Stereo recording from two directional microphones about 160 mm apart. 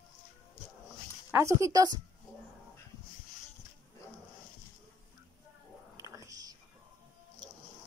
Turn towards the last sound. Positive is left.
turn(degrees=-20)  # may be behind; listen again after turning